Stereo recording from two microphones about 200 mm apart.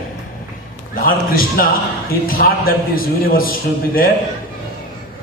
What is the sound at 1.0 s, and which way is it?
A man's voice, 45° left (ahead or behind).